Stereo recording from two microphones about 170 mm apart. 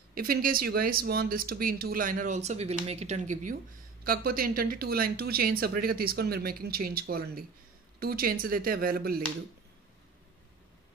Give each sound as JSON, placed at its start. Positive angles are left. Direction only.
{"t": 0.1, "sound": "speech", "side_deg": -60}
{"t": 4.0, "sound": "speech", "side_deg": -60}